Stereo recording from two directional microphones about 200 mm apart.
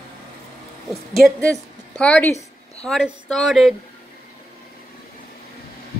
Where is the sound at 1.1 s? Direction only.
5° left (ahead or behind).